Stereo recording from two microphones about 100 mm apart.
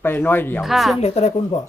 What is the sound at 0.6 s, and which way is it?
Speech, centre (ahead or behind).